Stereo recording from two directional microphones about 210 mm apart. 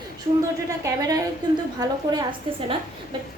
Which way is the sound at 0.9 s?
15° right (ahead or behind).